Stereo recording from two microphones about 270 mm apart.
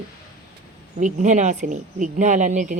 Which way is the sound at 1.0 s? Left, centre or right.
Right.